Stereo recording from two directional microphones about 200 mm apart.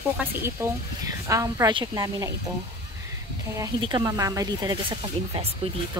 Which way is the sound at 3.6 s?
20° right (ahead or behind).